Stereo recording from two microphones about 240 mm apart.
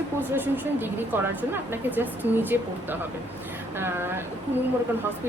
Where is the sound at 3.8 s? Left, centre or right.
Centre.